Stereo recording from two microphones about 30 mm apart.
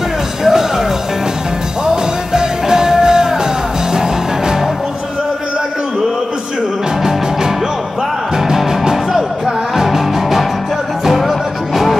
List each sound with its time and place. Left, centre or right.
0.4 s music: centre
2.3 s music: right
8.5 s music: centre